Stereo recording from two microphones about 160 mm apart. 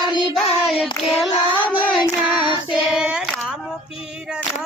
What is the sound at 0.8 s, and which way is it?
Child singing, 5° right (ahead or behind).